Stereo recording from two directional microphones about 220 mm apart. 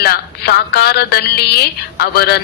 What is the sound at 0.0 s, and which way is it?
Speech, 45° left (ahead or behind).